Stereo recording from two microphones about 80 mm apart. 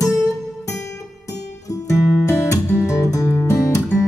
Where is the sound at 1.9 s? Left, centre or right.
Left.